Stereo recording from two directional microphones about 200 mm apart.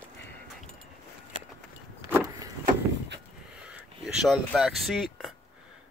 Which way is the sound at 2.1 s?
15° right (ahead or behind).